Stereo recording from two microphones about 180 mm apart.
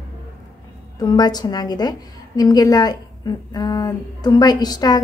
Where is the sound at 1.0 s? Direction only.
20° left (ahead or behind).